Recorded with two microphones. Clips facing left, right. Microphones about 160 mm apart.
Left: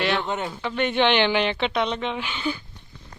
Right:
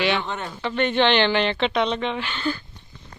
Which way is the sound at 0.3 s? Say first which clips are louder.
Left 3 dB; 15° left (ahead or behind).